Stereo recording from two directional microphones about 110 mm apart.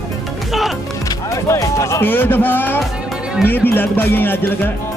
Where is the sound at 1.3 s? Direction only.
30° left (ahead or behind).